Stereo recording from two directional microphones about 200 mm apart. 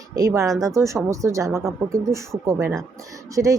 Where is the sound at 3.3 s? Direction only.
15° right (ahead or behind).